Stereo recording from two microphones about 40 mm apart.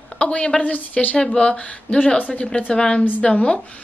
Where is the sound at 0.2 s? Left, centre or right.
Left.